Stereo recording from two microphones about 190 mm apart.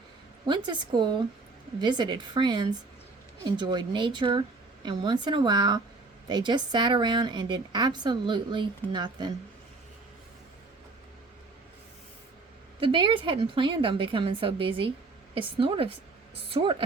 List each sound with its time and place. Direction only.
0.4 s a woman's voice: 25° right (ahead or behind)
12.8 s a woman's voice: 25° right (ahead or behind)